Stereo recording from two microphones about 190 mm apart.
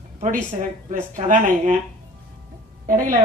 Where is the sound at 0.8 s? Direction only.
40° right (ahead or behind).